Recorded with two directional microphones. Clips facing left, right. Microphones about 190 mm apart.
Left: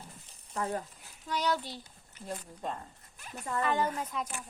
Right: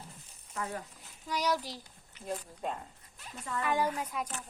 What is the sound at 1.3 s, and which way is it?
Speech, 10° right (ahead or behind).